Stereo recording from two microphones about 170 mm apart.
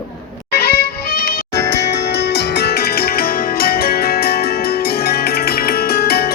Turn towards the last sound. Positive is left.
turn(degrees=65)  # may be behind; listen again after turning